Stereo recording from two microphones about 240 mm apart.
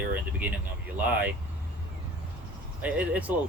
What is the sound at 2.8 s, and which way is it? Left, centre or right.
Speech, centre.